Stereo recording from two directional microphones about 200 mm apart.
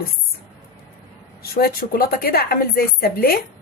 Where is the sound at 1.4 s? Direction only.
50° left (ahead or behind).